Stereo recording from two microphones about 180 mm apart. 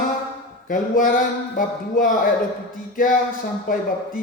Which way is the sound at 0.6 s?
50° left (ahead or behind).